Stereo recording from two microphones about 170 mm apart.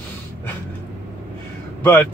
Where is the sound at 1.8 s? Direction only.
10° left (ahead or behind).